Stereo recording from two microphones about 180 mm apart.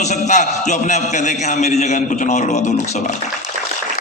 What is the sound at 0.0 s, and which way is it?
A man's voice, 40° left (ahead or behind).